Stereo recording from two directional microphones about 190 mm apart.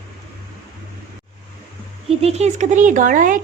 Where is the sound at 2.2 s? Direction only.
35° right (ahead or behind).